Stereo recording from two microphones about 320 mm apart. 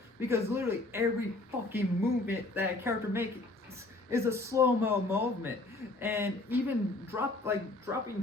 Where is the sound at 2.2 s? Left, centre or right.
Centre.